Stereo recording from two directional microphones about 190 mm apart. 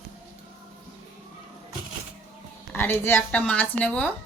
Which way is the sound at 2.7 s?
10° left (ahead or behind).